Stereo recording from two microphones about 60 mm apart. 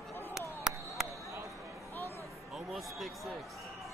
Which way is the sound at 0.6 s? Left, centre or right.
Centre.